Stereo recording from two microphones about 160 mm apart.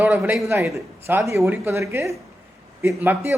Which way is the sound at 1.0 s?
15° right (ahead or behind).